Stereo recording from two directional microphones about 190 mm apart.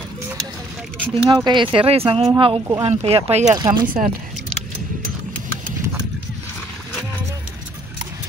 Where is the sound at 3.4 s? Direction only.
20° right (ahead or behind).